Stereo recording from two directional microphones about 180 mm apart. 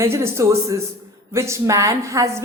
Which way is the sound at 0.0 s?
15° right (ahead or behind).